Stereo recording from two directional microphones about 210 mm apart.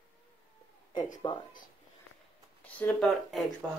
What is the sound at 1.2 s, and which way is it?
Speech, 20° left (ahead or behind).